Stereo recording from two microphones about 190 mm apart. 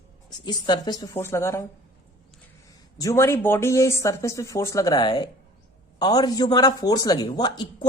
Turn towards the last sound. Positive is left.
turn(degrees=20)  # may be behind; listen again after turning